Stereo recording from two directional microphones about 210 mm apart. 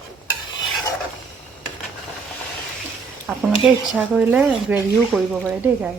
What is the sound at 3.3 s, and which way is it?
Speech, 5° right (ahead or behind).